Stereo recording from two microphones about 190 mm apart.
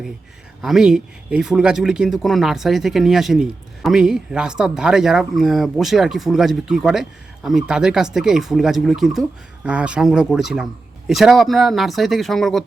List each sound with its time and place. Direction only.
0.6 s speech: 5° right (ahead or behind)